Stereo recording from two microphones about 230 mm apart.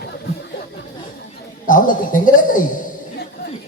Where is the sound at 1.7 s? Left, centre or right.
Left.